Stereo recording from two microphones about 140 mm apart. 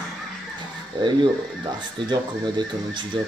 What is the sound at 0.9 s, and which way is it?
Speech, 35° right (ahead or behind).